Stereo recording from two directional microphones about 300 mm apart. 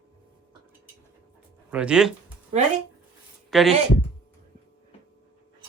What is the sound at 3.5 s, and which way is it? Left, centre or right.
Speech, centre.